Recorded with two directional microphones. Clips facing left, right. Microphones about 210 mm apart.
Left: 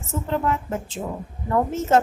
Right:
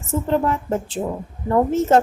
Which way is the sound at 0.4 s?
35° right (ahead or behind).